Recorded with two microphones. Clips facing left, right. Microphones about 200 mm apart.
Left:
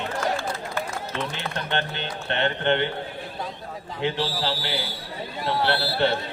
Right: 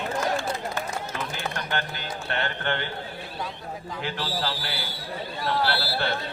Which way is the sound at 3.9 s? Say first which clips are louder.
Left 5 dB; 20° left (ahead or behind).